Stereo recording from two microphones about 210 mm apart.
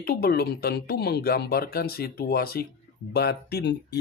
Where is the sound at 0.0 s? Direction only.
45° left (ahead or behind).